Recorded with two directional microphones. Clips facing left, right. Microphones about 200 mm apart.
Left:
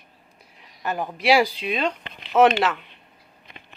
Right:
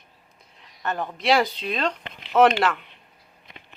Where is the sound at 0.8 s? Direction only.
10° left (ahead or behind).